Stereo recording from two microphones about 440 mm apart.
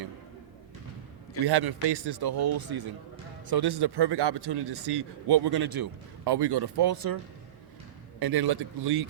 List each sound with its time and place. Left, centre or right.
1.5 s speech: right
8.2 s speech: right